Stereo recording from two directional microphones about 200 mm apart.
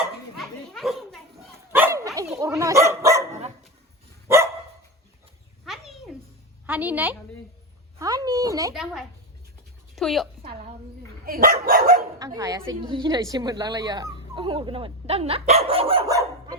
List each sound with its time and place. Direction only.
0.3 s dog: centre (ahead or behind)
1.7 s dog: 10° right (ahead or behind)
5.6 s a sound: centre (ahead or behind)
6.7 s a woman's voice: 10° right (ahead or behind)
8.7 s a child's voice: centre (ahead or behind)
10.5 s a sound: 40° right (ahead or behind)
11.3 s speech: 45° right (ahead or behind)
12.2 s a woman's voice: 20° right (ahead or behind)